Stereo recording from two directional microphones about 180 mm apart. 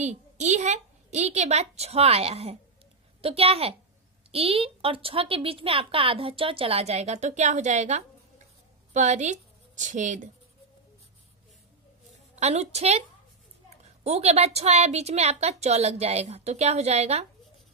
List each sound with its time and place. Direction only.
0.0 s a woman's voice: 40° right (ahead or behind)
12.4 s speech: 35° right (ahead or behind)